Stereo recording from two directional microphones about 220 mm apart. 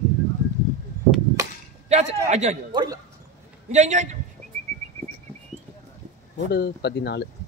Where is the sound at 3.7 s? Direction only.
30° right (ahead or behind).